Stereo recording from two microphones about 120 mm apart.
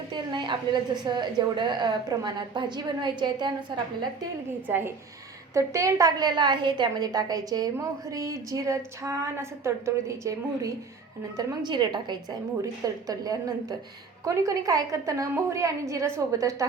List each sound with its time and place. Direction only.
0.1 s a woman's voice: 40° right (ahead or behind)
4.6 s a woman's voice: 15° right (ahead or behind)
11.3 s a woman's voice: 35° right (ahead or behind)